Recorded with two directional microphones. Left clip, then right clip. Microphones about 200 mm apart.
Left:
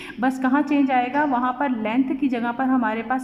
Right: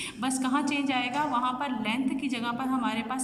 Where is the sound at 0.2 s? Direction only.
35° left (ahead or behind).